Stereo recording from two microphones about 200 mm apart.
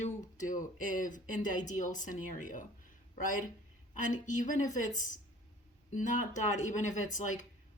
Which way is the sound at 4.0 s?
40° left (ahead or behind).